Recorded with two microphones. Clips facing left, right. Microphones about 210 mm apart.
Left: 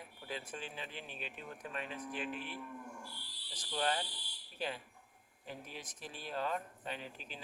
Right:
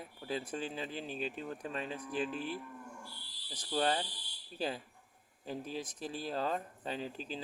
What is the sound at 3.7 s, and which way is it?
Speech, 30° right (ahead or behind).